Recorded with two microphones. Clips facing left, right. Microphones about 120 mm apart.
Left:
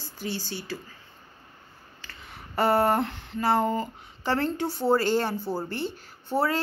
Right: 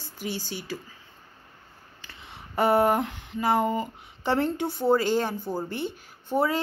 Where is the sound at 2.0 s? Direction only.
20° right (ahead or behind).